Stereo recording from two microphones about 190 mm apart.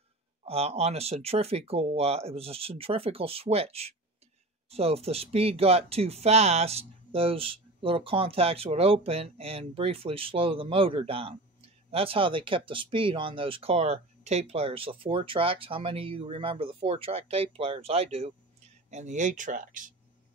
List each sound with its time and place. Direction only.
0.5 s speech: 30° right (ahead or behind)